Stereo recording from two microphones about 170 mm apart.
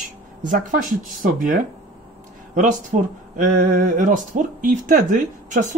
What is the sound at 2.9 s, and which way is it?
Speech, 45° right (ahead or behind).